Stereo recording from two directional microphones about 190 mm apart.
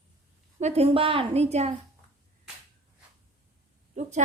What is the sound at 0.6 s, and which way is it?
A woman's voice, 35° right (ahead or behind).